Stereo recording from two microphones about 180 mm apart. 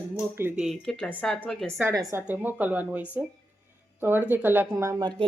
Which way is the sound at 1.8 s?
20° right (ahead or behind).